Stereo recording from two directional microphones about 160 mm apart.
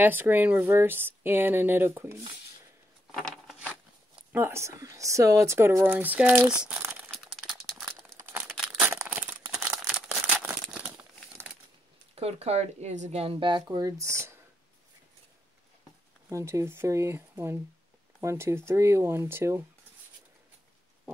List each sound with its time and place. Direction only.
0.0 s speech: 10° right (ahead or behind)
3.2 s a sound: centre (ahead or behind)
4.3 s speech: 15° right (ahead or behind)
6.6 s crumpling: 10° right (ahead or behind)
7.1 s crumpling: centre (ahead or behind)
8.2 s crumpling: 15° right (ahead or behind)
8.5 s a sound: centre (ahead or behind)
9.5 s crumpling: 5° right (ahead or behind)
12.2 s a woman's voice: 40° right (ahead or behind); by 14.3 s 20° right (ahead or behind)
16.3 s speech: 20° right (ahead or behind)